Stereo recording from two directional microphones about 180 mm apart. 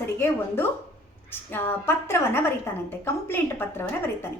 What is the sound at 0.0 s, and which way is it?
A woman's voice, 10° left (ahead or behind).